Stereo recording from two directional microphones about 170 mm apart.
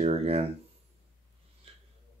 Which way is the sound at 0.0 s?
35° right (ahead or behind).